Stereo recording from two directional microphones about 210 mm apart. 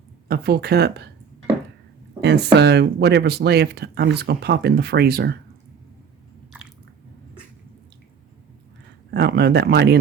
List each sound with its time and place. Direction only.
0.3 s speech: 50° right (ahead or behind)
2.2 s speech: 55° right (ahead or behind)
6.5 s biting: 5° right (ahead or behind)
9.1 s speech: 50° right (ahead or behind)